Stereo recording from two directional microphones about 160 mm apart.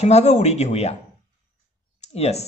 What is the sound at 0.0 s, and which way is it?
Speech, 45° left (ahead or behind).